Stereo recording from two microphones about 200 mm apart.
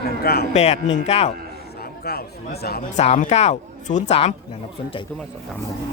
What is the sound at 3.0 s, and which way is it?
Speech, 35° left (ahead or behind).